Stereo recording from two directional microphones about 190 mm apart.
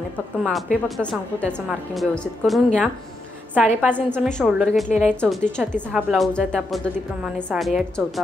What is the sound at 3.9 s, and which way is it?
A woman's voice, 5° left (ahead or behind).